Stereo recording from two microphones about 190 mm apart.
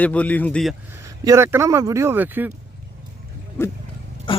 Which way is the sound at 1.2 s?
15° right (ahead or behind).